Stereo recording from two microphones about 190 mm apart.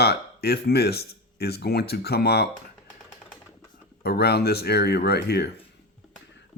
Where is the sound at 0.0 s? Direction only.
60° left (ahead or behind).